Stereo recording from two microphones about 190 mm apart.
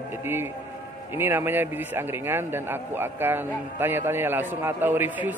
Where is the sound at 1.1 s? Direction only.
10° right (ahead or behind).